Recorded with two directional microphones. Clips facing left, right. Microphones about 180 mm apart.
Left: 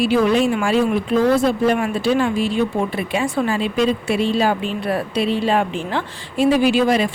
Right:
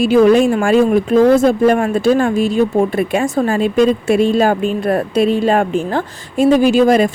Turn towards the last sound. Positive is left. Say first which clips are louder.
# right 5 dB
turn(degrees=-45)  # may be behind; listen again after turning